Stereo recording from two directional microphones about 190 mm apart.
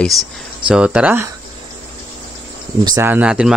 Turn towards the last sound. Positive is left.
turn(degrees=-5)  # may be behind; listen again after turning